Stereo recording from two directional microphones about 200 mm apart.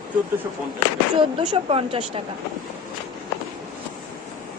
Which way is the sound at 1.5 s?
30° right (ahead or behind).